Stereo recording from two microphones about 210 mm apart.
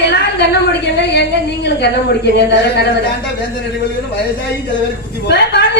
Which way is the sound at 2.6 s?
50° left (ahead or behind).